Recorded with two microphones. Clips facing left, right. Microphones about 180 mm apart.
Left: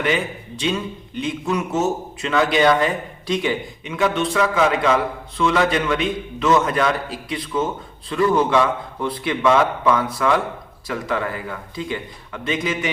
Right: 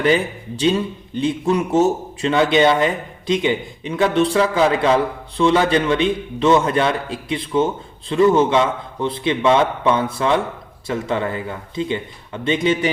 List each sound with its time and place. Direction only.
0.0 s speech: 35° right (ahead or behind)
3.8 s a man's voice: 35° right (ahead or behind)